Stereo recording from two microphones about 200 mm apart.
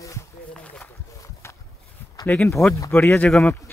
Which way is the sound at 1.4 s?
15° left (ahead or behind).